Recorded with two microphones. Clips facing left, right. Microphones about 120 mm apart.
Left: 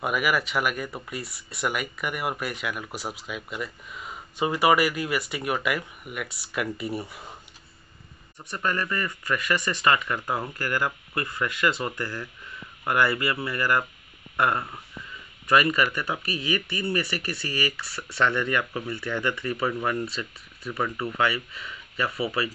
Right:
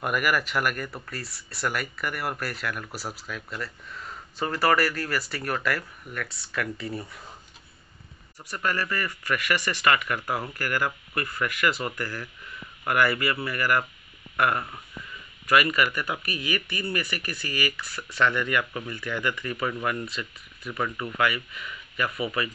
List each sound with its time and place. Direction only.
0.0 s speech: 5° left (ahead or behind)
1.2 s speech: centre (ahead or behind); by 7.1 s 20° left (ahead or behind)
8.4 s speech: 20° left (ahead or behind)
14.3 s a sound: 20° left (ahead or behind)
15.4 s speech: 25° left (ahead or behind)